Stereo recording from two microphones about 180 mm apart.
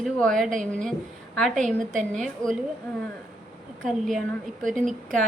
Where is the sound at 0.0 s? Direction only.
5° left (ahead or behind).